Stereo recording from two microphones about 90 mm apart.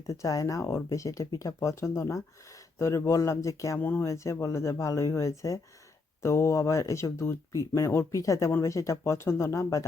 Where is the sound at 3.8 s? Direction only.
20° left (ahead or behind).